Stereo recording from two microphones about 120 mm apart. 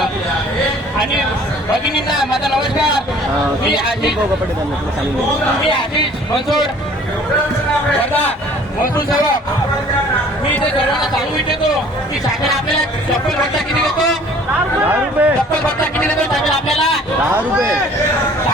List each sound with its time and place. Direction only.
2.1 s speech: 5° right (ahead or behind)
14.8 s speech: 15° right (ahead or behind)
16.0 s a sound: centre (ahead or behind)